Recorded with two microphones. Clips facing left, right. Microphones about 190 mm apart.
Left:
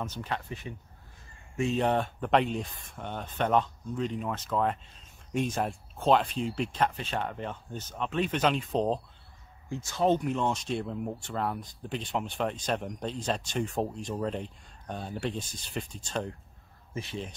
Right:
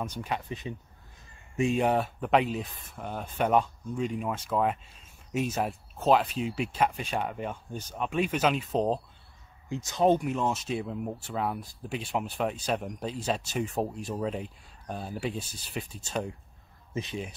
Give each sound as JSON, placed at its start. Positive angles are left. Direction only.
{"t": 0.0, "sound": "speech", "side_deg": -10}
{"t": 9.7, "sound": "speech", "side_deg": -20}